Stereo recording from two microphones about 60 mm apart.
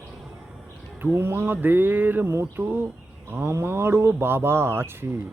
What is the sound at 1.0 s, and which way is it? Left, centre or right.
Speech, right.